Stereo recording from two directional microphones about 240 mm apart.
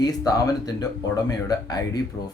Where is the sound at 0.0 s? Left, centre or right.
Centre.